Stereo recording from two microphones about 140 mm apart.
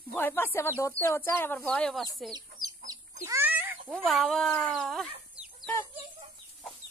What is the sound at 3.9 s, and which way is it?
Speech, centre (ahead or behind).